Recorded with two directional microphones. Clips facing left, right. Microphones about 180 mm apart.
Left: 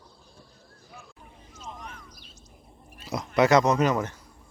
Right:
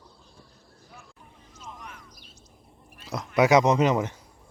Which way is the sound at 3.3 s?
10° right (ahead or behind).